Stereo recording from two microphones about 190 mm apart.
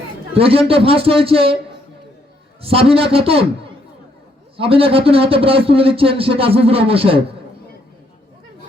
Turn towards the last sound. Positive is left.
turn(degrees=-30)  # may be behind; listen again after turning